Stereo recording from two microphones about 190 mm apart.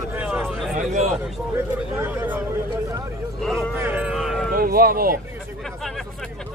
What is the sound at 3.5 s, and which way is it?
Speech, 10° right (ahead or behind).